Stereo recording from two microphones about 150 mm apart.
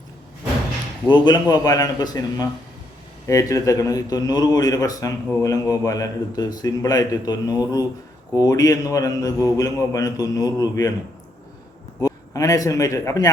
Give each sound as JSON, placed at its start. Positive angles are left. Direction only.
{"t": 1.0, "sound": "a man's voice", "side_deg": 30}
{"t": 11.9, "sound": "a man's voice", "side_deg": 20}